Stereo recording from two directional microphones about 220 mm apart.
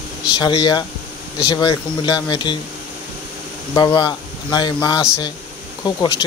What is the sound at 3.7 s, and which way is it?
Speech, 20° left (ahead or behind).